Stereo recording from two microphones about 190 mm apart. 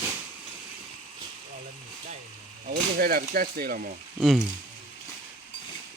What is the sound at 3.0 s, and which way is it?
Speech, 50° right (ahead or behind).